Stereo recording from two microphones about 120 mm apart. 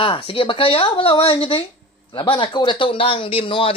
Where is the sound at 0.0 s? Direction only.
45° left (ahead or behind).